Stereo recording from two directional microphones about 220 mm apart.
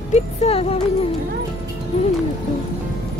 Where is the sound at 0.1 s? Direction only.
30° left (ahead or behind).